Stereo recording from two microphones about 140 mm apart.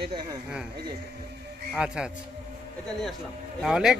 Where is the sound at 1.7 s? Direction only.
5° right (ahead or behind).